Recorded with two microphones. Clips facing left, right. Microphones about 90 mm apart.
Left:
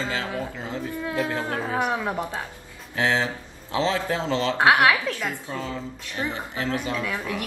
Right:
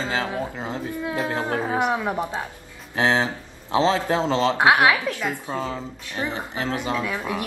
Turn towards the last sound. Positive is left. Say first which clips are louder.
# right 2 dB
turn(degrees=-20)  # may be behind; listen again after turning